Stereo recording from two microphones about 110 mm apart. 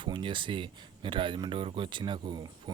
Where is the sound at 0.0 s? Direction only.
50° right (ahead or behind).